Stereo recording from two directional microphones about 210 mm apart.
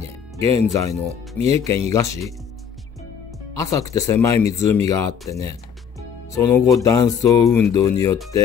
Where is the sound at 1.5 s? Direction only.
15° left (ahead or behind).